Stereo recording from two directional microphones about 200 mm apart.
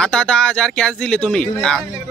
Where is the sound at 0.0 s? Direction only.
5° left (ahead or behind).